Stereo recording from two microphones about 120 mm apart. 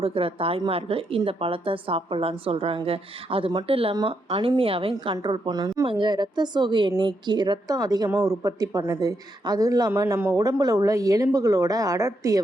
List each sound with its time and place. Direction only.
0.0 s a woman's voice: 50° right (ahead or behind); by 12.4 s 25° right (ahead or behind)